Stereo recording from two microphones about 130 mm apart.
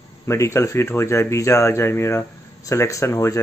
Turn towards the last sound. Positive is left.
turn(degrees=25)  # may be behind; listen again after turning